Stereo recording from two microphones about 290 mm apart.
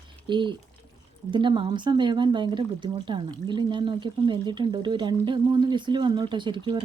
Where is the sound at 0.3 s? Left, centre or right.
Centre.